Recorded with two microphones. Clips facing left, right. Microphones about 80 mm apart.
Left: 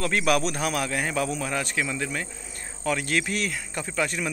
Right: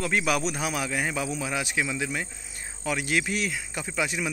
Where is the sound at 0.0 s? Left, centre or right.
Centre.